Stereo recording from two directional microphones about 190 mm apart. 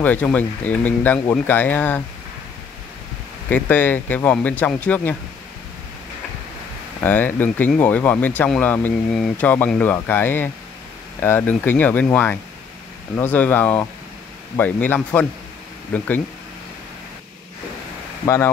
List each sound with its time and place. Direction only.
0.0 s speech: 10° left (ahead or behind)
3.4 s speech: 10° left (ahead or behind)
7.0 s speech: 10° left (ahead or behind)
18.2 s speech: 15° left (ahead or behind)